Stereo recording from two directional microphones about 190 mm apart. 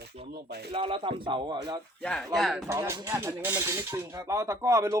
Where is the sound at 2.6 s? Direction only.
15° right (ahead or behind).